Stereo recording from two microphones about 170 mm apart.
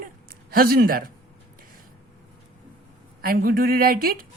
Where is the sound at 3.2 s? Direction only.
60° right (ahead or behind).